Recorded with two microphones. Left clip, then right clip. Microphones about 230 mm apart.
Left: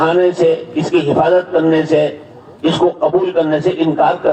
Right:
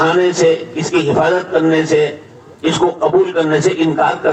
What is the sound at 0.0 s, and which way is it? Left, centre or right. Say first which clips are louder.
A man's voice: even; right.